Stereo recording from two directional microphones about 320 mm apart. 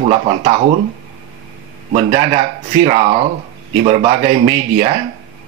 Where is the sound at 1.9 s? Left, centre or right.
Centre.